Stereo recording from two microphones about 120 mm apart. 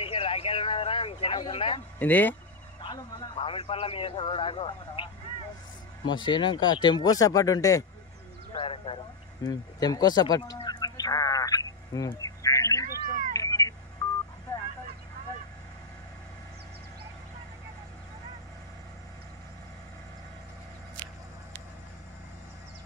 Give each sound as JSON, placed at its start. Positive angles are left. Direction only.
{"t": 0.0, "sound": "a sound", "side_deg": 50}
{"t": 1.5, "sound": "speech", "side_deg": 50}
{"t": 2.0, "sound": "speech", "side_deg": 15}
{"t": 2.8, "sound": "a man's voice", "side_deg": 40}
{"t": 8.5, "sound": "speech", "side_deg": 50}
{"t": 9.4, "sound": "a sound", "side_deg": 35}
{"t": 13.4, "sound": "telephone", "side_deg": 30}
{"t": 14.0, "sound": "telephone dialing", "side_deg": 30}